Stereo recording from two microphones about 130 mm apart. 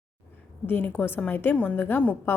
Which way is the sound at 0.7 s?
15° left (ahead or behind).